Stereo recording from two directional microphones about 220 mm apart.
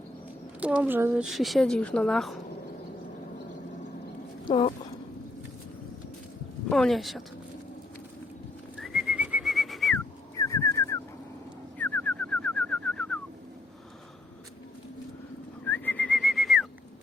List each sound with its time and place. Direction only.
0.6 s speech: 5° right (ahead or behind)
4.4 s speech: 20° left (ahead or behind)
6.7 s speech: centre (ahead or behind)
8.8 s whistling: centre (ahead or behind)
10.3 s bird: 15° left (ahead or behind)
11.8 s pigeon: 5° left (ahead or behind)
15.6 s whistling: 10° left (ahead or behind)